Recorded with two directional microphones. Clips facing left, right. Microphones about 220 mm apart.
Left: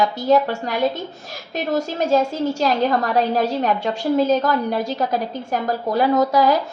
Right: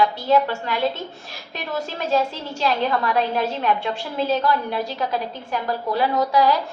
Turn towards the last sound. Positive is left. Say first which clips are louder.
# left 3 dB
turn(degrees=45)  # may be behind; listen again after turning